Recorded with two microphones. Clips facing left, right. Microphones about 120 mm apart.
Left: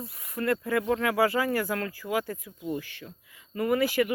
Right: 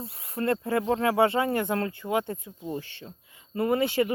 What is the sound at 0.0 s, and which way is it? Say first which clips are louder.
Speech: right 1 dB; 30° right (ahead or behind).